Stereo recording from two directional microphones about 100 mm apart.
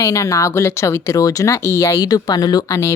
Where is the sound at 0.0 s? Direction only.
35° left (ahead or behind).